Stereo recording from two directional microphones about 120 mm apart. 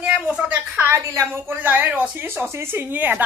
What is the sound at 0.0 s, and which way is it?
Speech, 10° right (ahead or behind).